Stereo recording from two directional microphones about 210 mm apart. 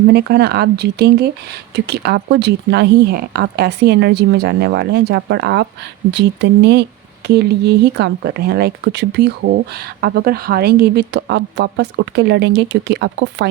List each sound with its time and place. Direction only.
0.1 s speech: 50° right (ahead or behind)